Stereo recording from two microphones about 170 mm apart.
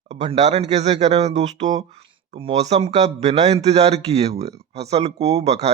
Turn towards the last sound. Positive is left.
turn(degrees=-40)  # may be behind; listen again after turning